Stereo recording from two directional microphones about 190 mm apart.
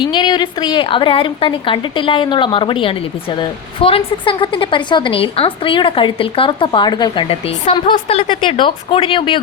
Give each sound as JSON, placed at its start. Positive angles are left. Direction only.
{"t": 0.0, "sound": "a woman's voice", "side_deg": 25}